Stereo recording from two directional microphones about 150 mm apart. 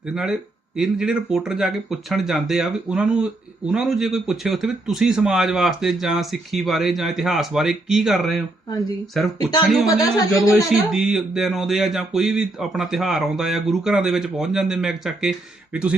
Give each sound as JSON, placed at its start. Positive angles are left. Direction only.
{"t": 0.1, "sound": "speech", "side_deg": -5}
{"t": 9.8, "sound": "speech", "side_deg": 25}
{"t": 10.9, "sound": "speech", "side_deg": -5}